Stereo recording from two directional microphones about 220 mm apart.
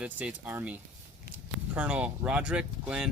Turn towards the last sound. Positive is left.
turn(degrees=-5)  # may be behind; listen again after turning